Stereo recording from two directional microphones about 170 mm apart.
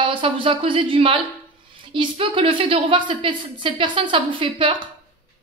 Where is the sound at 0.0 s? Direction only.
30° right (ahead or behind).